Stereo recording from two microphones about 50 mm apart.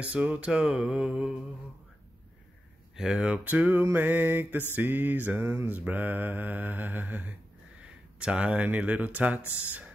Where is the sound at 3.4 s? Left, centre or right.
Right.